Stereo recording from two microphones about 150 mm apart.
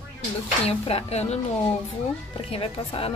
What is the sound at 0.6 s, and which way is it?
Speech, 40° left (ahead or behind).